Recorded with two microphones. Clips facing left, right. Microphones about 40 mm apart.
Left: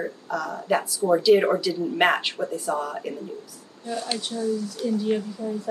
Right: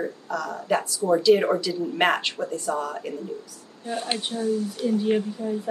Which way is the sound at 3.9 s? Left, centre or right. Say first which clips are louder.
Right 1 dB; right.